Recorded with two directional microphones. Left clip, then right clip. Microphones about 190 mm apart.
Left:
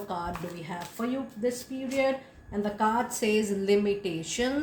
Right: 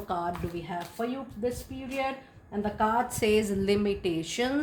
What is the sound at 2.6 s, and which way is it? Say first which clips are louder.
Speech: even; 35° right (ahead or behind).